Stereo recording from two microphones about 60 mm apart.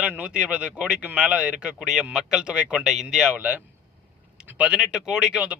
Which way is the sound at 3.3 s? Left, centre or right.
Right.